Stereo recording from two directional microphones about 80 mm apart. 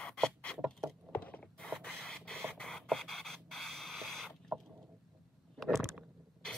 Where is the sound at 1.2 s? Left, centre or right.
Centre.